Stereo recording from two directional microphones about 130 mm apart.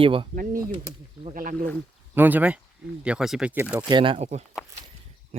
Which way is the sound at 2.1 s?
15° right (ahead or behind).